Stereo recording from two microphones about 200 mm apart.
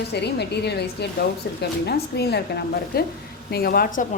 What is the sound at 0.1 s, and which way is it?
A woman's voice, 55° left (ahead or behind).